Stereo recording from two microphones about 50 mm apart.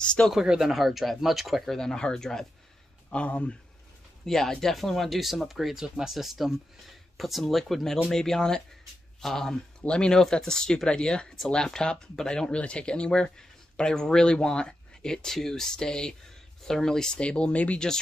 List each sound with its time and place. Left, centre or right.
0.0 s speech: centre
0.3 s speech: centre
1.8 s speech: centre
3.1 s speech: left
4.3 s speech: centre
17.2 s speech: left